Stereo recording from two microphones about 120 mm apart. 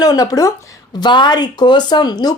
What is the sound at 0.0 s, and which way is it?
Speech, 30° left (ahead or behind).